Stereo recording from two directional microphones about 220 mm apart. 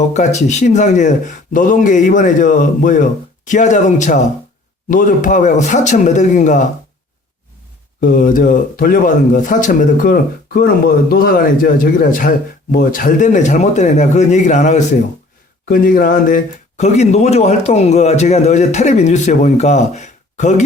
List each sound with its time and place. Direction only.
0.1 s speech: 30° left (ahead or behind)
8.0 s speech: 40° left (ahead or behind)